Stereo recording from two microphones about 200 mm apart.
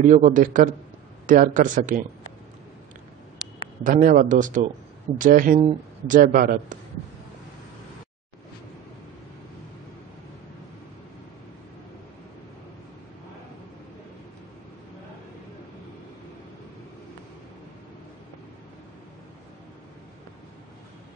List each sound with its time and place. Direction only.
0.0 s a man's voice: 40° right (ahead or behind)
3.8 s a man's voice: 40° right (ahead or behind)